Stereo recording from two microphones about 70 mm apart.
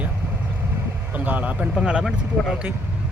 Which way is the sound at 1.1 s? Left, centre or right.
Right.